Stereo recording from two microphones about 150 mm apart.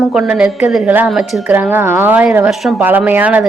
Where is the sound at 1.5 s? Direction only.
15° right (ahead or behind).